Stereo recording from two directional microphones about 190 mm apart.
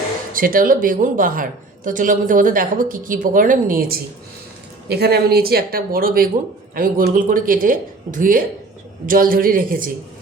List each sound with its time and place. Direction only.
0.3 s a woman's voice: 45° right (ahead or behind)